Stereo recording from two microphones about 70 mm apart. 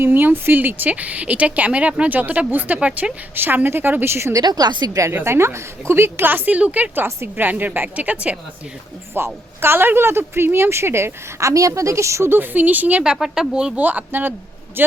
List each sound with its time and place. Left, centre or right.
0.0 s speech: right
4.4 s a woman's voice: right
5.1 s speech: right; by 8.4 s centre
9.1 s speech: right
13.1 s speech: centre
13.8 s speech: right